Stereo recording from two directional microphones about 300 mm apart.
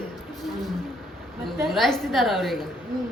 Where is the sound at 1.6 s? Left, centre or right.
Centre.